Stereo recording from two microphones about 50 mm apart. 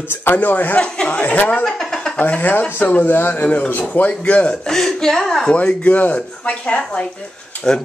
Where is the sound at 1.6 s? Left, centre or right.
Centre.